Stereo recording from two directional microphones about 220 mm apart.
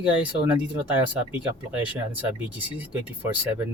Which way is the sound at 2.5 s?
10° right (ahead or behind).